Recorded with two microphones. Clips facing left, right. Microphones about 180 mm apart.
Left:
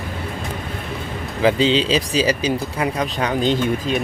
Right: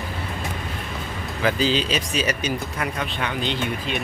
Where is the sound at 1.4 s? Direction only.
25° left (ahead or behind).